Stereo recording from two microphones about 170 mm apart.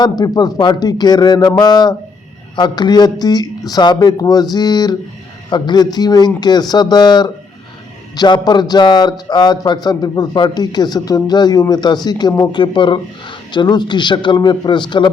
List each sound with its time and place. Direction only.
0.0 s a man's voice: 25° left (ahead or behind)